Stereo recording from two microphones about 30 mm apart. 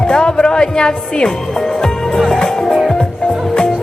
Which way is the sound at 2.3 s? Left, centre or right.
Centre.